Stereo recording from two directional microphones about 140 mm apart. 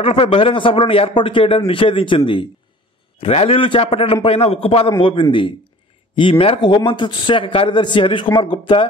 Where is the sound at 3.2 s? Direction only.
45° left (ahead or behind).